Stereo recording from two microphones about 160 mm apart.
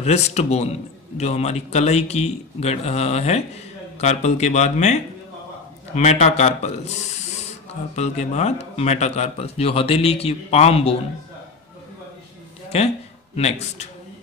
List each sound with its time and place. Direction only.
0.0 s a man's voice: 40° left (ahead or behind)
5.9 s a man's voice: 45° left (ahead or behind)
7.9 s a man's voice: 45° left (ahead or behind)
12.7 s a man's voice: 40° left (ahead or behind)